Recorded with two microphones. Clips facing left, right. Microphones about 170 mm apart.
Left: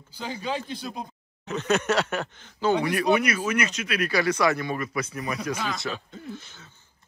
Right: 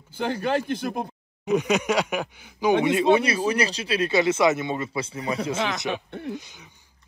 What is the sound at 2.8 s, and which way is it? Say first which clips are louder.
Speech: right 3 dB; 20° right (ahead or behind).